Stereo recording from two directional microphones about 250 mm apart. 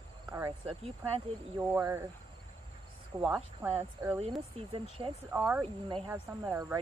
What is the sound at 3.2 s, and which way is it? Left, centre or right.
Speech, centre.